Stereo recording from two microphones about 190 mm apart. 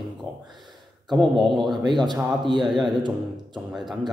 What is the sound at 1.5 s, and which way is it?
Speech, centre (ahead or behind).